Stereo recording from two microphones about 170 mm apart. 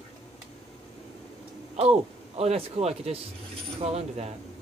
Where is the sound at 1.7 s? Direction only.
35° right (ahead or behind).